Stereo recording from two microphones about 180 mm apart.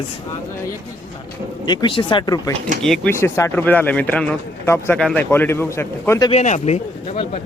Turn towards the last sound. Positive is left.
turn(degrees=35)  # may be behind; listen again after turning